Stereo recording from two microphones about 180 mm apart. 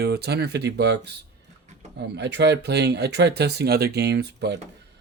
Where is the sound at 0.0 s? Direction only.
65° right (ahead or behind).